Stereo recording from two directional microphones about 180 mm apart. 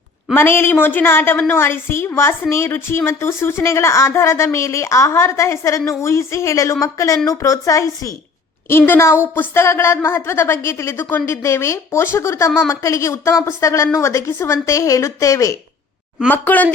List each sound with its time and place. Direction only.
0.3 s a woman's voice: 10° left (ahead or behind)